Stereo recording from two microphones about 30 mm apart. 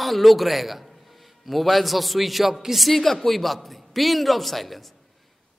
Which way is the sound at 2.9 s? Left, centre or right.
Centre.